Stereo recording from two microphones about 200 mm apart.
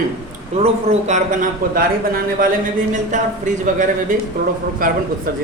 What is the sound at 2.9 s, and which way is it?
A man's voice, 40° right (ahead or behind).